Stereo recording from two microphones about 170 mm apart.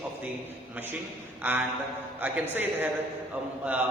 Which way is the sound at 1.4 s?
10° right (ahead or behind).